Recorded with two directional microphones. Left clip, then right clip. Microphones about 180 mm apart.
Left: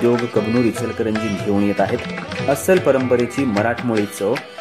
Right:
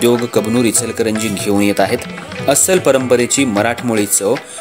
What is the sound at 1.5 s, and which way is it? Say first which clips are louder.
Speech: right 5 dB; 35° right (ahead or behind).